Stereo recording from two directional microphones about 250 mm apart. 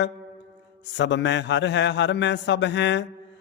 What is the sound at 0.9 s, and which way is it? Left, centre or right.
A man's voice, left.